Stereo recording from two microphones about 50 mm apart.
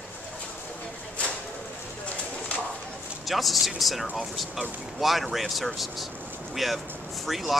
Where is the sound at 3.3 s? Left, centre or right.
Centre.